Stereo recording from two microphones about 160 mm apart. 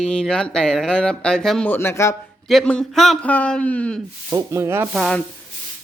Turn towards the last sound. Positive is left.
turn(degrees=0)  # may be behind; listen again after turning